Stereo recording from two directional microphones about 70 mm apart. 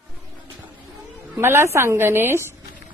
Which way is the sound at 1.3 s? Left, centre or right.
Right.